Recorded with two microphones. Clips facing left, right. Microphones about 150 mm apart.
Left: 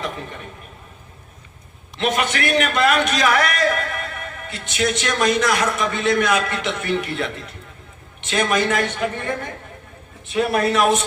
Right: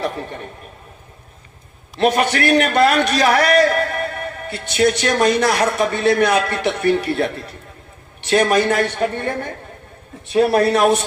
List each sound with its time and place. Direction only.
2.0 s a man's voice: 40° right (ahead or behind)
8.3 s a man's voice: 35° right (ahead or behind)